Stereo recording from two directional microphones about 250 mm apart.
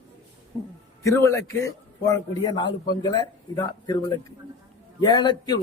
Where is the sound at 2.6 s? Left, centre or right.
Left.